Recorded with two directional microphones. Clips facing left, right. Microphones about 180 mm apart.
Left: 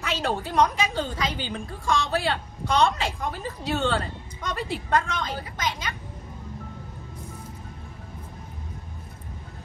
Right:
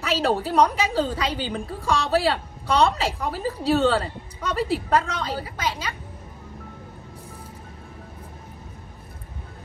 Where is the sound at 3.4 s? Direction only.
35° right (ahead or behind).